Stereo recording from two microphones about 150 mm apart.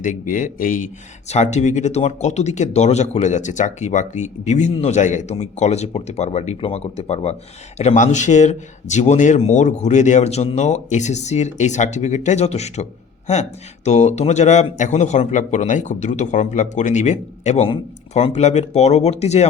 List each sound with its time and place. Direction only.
0.0 s speech: 60° left (ahead or behind)
1.3 s speech: 50° left (ahead or behind)